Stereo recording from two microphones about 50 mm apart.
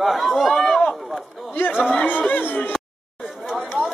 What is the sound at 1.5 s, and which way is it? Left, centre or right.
Speech, left.